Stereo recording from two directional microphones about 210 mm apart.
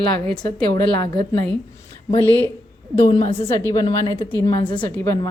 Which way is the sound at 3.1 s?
25° left (ahead or behind).